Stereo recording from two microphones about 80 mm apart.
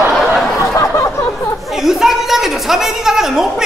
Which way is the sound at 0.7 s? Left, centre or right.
Left.